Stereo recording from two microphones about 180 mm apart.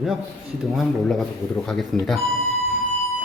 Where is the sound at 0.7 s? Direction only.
Centre (ahead or behind).